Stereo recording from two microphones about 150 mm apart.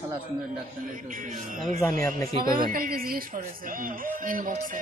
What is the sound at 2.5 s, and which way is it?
Speech, 75° right (ahead or behind).